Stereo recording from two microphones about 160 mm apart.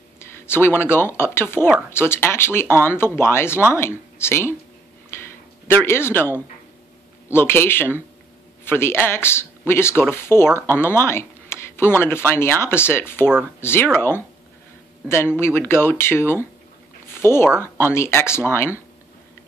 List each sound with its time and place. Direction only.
0.2 s speech: 15° left (ahead or behind)
5.1 s a sound: 15° left (ahead or behind)
5.7 s speech: 15° left (ahead or behind)
15.3 s speech: 15° left (ahead or behind)